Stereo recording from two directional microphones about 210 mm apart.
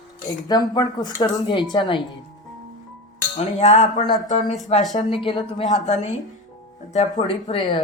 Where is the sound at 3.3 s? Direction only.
35° left (ahead or behind).